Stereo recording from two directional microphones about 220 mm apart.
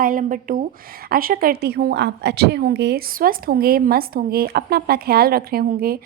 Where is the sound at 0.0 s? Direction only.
40° right (ahead or behind).